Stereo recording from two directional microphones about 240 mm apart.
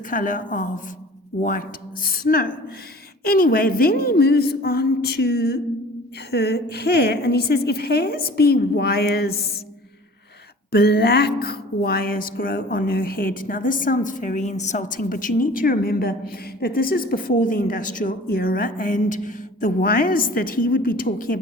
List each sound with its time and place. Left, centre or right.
0.1 s speech: left
10.7 s speech: left